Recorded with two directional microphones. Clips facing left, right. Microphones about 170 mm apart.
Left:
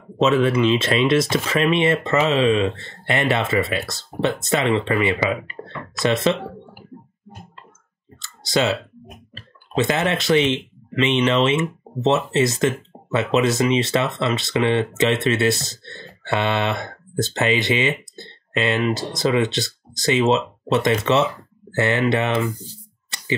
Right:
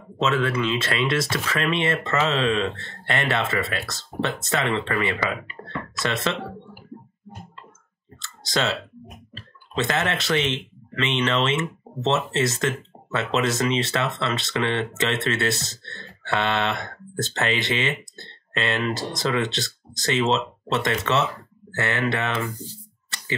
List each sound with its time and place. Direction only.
0.2 s speech: 20° left (ahead or behind)
8.2 s clicking: 10° left (ahead or behind)
9.8 s speech: 15° left (ahead or behind)
23.0 s a sound: 15° left (ahead or behind)